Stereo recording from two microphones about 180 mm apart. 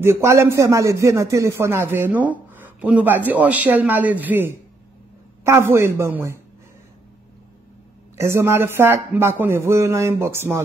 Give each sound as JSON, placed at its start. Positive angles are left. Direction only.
{"t": 0.0, "sound": "speech", "side_deg": -15}
{"t": 8.2, "sound": "speech", "side_deg": -15}